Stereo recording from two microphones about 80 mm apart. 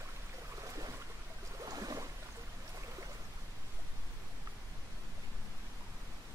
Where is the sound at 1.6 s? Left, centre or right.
Right.